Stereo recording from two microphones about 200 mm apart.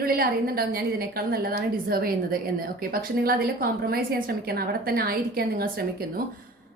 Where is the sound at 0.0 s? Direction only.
50° right (ahead or behind).